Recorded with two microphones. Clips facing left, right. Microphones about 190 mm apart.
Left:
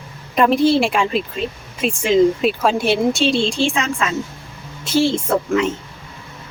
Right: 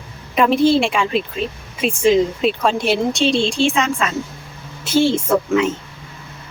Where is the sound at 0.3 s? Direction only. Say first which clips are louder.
Even; centre (ahead or behind).